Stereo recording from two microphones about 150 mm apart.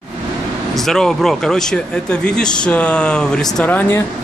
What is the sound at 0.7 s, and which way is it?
Speech, centre (ahead or behind).